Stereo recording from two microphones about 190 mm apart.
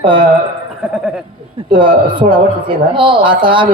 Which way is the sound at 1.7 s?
25° right (ahead or behind).